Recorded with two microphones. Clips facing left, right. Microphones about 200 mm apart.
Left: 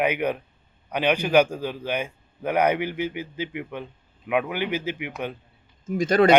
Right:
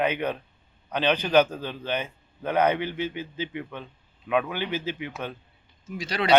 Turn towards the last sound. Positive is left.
turn(degrees=50)  # may be behind; listen again after turning